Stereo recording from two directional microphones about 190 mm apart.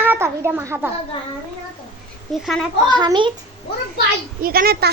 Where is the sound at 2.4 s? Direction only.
Centre (ahead or behind).